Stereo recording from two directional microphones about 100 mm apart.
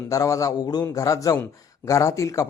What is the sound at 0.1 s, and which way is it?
Speech, 35° left (ahead or behind).